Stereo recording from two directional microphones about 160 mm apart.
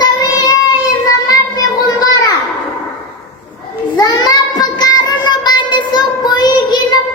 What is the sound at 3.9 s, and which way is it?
Child singing, 25° left (ahead or behind).